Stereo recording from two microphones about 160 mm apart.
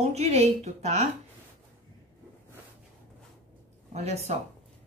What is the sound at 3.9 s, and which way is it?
Speech, 45° right (ahead or behind).